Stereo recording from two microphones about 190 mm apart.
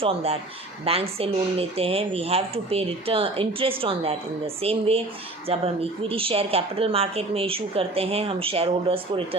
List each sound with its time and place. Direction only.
0.0 s speech: 30° right (ahead or behind)